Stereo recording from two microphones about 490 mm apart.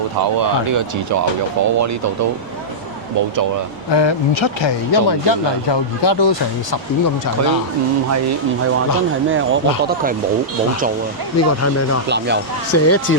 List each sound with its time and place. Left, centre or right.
0.3 s speech: right
3.9 s speech: left
11.3 s speech: left
12.0 s speech: right
12.7 s speech: left